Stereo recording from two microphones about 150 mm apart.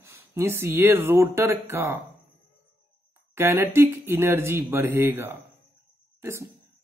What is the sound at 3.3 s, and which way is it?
Speech, 15° right (ahead or behind).